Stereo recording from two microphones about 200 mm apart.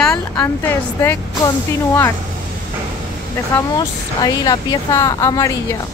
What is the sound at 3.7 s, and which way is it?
A woman's voice, 20° left (ahead or behind).